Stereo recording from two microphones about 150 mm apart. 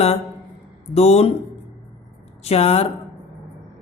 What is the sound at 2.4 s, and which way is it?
Speech, 40° left (ahead or behind).